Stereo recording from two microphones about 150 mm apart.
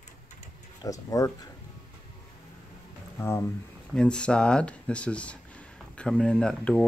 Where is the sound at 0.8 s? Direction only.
25° left (ahead or behind).